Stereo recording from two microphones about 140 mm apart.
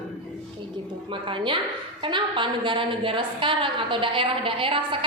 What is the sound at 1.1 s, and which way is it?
A woman's voice, 35° right (ahead or behind).